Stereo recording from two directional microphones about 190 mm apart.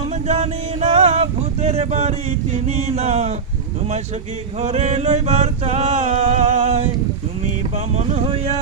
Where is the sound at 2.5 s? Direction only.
35° right (ahead or behind).